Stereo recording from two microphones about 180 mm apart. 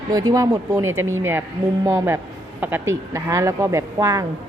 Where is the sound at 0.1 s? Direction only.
20° right (ahead or behind).